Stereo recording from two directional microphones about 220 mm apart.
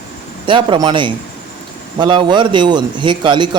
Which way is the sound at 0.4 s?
20° right (ahead or behind).